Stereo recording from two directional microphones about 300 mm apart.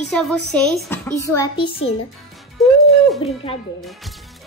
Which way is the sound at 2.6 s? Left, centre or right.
Centre.